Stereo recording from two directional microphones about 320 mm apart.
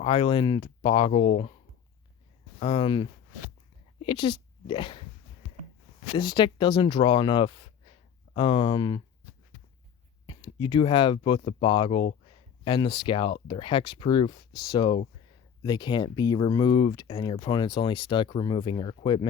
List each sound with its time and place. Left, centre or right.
0.0 s speech: centre
2.6 s speech: centre
6.1 s speech: centre
10.2 s speech: centre